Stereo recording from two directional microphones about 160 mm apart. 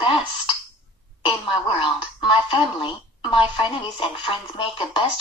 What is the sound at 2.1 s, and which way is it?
Speech, 30° left (ahead or behind).